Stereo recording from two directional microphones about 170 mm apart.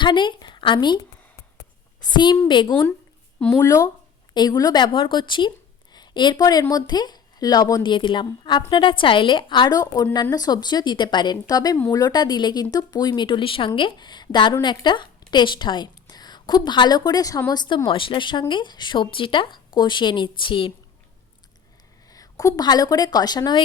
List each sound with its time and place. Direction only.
0.0 s a sound: 30° left (ahead or behind)
2.1 s a woman's voice: 25° left (ahead or behind)
22.1 s speech: 20° left (ahead or behind)